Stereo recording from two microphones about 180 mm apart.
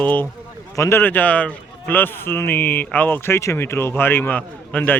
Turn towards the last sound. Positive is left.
turn(degrees=10)  # may be behind; listen again after turning